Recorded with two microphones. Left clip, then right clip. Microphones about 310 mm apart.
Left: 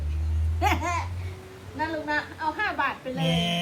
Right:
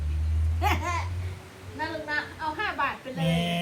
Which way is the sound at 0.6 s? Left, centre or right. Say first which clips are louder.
Left 2 dB; left.